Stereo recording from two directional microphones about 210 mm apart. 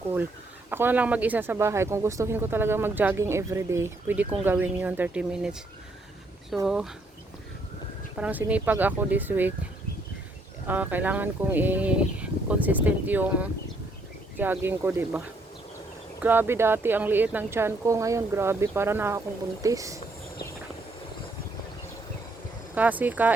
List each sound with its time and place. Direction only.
0.7 s speech: 10° right (ahead or behind)
6.7 s speech: centre (ahead or behind)
8.2 s speech: 5° right (ahead or behind)
10.7 s speech: 10° right (ahead or behind)
16.2 s speech: 10° right (ahead or behind)
22.7 s speech: 10° right (ahead or behind)